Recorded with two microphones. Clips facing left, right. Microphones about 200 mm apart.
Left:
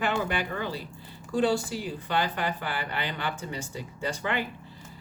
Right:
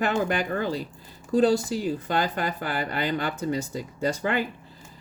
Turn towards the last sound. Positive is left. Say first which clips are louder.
# right 5 dB
turn(degrees=-40)  # may be behind; listen again after turning